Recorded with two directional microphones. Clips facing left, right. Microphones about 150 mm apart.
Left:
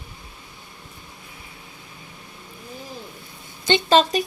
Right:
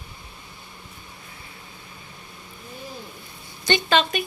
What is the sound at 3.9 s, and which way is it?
Speech, 35° left (ahead or behind).